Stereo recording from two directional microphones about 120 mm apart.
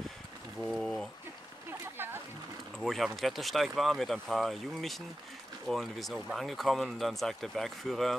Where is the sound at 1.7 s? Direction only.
20° right (ahead or behind).